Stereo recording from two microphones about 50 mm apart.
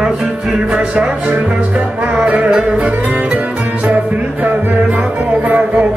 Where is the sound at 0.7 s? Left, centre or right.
Right.